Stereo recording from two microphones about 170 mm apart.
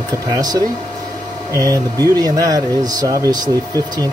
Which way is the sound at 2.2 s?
20° right (ahead or behind).